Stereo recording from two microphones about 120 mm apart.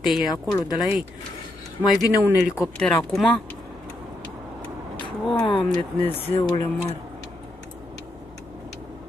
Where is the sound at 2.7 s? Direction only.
10° left (ahead or behind).